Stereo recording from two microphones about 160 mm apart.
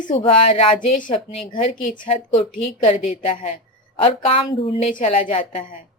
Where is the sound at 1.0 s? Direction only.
55° left (ahead or behind).